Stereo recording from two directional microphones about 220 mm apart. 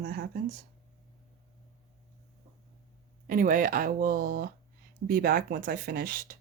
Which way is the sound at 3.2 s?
40° right (ahead or behind).